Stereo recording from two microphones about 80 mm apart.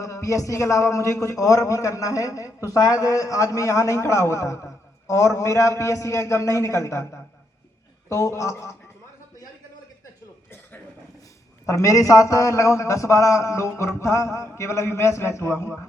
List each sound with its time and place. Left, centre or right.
0.0 s a man's voice: left
8.1 s a man's voice: left
11.6 s a man's voice: left